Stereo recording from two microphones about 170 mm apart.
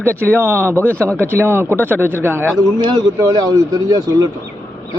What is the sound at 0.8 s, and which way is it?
Speech, 10° left (ahead or behind).